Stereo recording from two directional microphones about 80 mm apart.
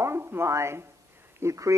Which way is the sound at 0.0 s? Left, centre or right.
Right.